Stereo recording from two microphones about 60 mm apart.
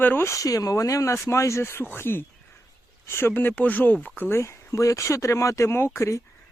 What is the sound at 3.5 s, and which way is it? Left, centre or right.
Speech, left.